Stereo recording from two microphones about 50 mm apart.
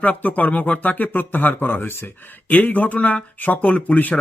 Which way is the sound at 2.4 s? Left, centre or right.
Left.